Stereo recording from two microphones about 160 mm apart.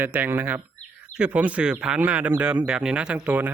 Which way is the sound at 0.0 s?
10° right (ahead or behind).